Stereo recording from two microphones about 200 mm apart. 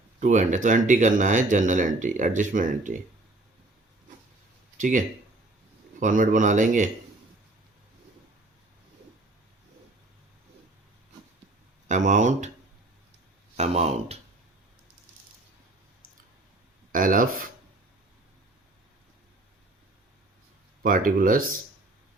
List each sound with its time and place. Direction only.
0.2 s speech: 40° right (ahead or behind)
4.8 s speech: 40° right (ahead or behind)
11.9 s speech: 35° right (ahead or behind)
13.6 s speech: 35° right (ahead or behind)
16.9 s speech: 45° right (ahead or behind)
20.8 s speech: 45° right (ahead or behind)